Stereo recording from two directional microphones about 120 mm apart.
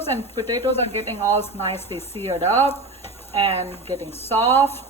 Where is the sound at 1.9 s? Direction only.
20° left (ahead or behind).